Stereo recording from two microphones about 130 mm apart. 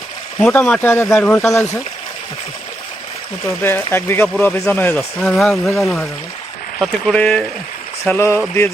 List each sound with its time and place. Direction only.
0.3 s speech: 10° left (ahead or behind)
3.6 s speech: 20° left (ahead or behind)